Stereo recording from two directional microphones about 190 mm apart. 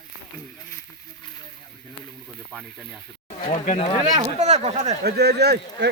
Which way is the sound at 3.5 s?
30° left (ahead or behind).